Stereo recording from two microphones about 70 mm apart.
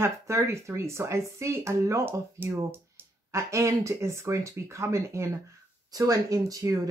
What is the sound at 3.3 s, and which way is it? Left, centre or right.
A woman's voice, right.